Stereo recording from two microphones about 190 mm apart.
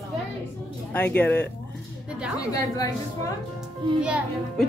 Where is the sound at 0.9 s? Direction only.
10° left (ahead or behind).